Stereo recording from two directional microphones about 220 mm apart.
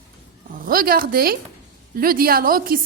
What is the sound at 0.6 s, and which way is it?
A woman's voice, 40° right (ahead or behind).